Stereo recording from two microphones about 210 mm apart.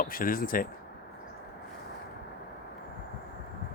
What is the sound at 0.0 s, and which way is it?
Speech, 45° left (ahead or behind).